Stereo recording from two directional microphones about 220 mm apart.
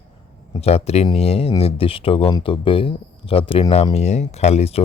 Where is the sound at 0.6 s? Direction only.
30° left (ahead or behind).